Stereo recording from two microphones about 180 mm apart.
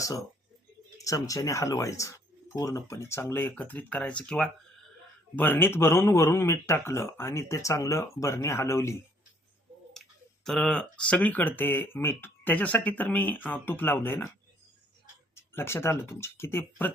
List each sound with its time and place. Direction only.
0.0 s speech: 20° left (ahead or behind)
10.4 s speech: 5° left (ahead or behind)
15.4 s speech: 15° left (ahead or behind)